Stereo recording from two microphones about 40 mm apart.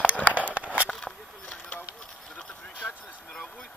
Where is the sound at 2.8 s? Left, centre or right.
Centre.